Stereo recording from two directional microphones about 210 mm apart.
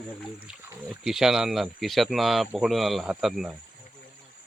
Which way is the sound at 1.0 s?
Centre (ahead or behind).